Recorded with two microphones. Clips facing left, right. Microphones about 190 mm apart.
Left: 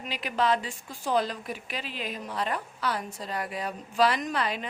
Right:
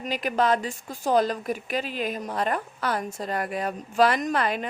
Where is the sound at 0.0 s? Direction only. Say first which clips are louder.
Right 4 dB; 45° right (ahead or behind).